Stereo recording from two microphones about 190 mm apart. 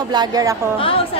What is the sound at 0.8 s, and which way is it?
Speech, 30° left (ahead or behind).